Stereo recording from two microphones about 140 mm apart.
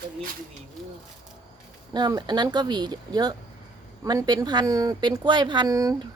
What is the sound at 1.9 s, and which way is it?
Speech, 30° right (ahead or behind).